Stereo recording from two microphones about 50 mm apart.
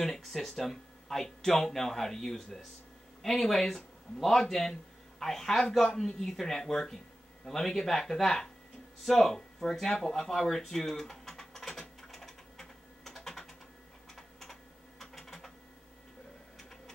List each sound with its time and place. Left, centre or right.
0.0 s speech: centre
9.0 s a sound: centre
14.1 s typing: centre